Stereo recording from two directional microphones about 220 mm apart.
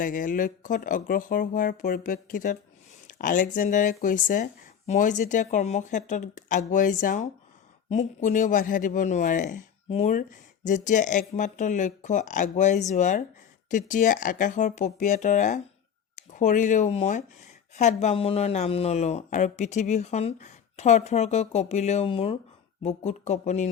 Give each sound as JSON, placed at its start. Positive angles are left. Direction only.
{"t": 0.0, "sound": "speech", "side_deg": 35}